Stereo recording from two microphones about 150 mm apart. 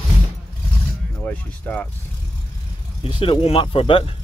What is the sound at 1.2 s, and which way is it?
Speech, 10° left (ahead or behind).